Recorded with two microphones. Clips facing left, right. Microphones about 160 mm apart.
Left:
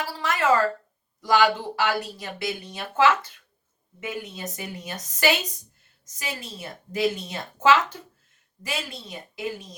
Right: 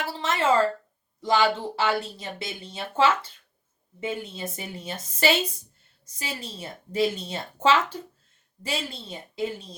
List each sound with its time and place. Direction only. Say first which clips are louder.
0.0 s a woman's voice: even; 25° right (ahead or behind)